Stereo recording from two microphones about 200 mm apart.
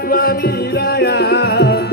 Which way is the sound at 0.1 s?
50° left (ahead or behind).